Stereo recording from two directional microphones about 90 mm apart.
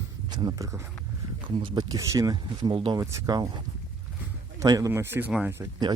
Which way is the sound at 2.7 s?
90° right.